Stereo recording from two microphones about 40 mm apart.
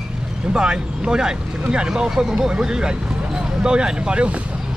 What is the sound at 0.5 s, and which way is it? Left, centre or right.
Speech, right.